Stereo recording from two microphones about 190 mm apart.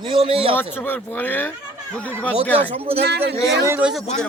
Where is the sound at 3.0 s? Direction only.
60° right (ahead or behind).